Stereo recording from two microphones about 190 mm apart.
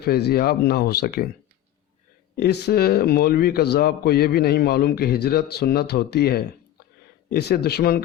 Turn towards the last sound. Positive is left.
turn(degrees=55)  # may be behind; listen again after turning